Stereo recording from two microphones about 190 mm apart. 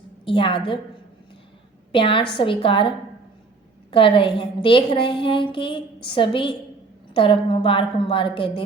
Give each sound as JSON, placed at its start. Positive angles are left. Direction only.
{"t": 0.3, "sound": "a woman's voice", "side_deg": 25}
{"t": 1.9, "sound": "a woman's voice", "side_deg": 25}
{"t": 3.9, "sound": "a woman's voice", "side_deg": 25}